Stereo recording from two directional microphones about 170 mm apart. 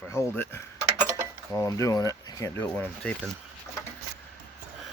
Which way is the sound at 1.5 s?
20° left (ahead or behind).